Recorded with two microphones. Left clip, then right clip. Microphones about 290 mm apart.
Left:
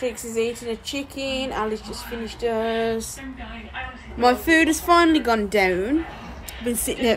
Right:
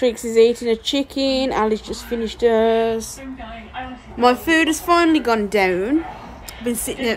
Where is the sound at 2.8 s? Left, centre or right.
Centre.